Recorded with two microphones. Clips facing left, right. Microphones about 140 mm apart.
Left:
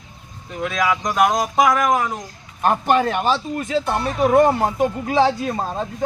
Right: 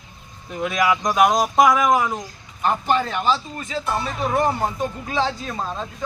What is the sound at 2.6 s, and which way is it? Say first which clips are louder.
A man's voice: left 3 dB; 55° left (ahead or behind).